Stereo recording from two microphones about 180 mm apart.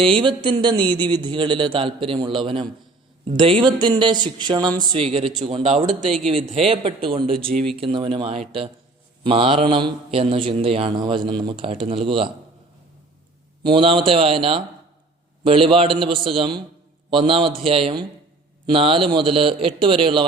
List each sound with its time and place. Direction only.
0.0 s a man's voice: 25° right (ahead or behind)
13.6 s a man's voice: 25° right (ahead or behind)